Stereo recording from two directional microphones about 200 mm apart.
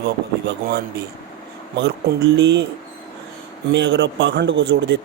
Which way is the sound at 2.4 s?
60° right (ahead or behind).